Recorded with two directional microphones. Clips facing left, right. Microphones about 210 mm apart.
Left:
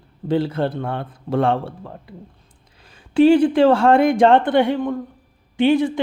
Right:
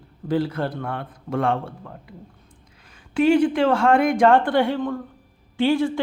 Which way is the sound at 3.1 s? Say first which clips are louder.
Left 5 dB; 30° left (ahead or behind).